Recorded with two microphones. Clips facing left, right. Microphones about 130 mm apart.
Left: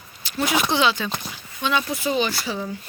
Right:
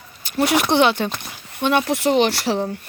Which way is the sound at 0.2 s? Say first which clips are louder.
Right 6 dB; 50° right (ahead or behind).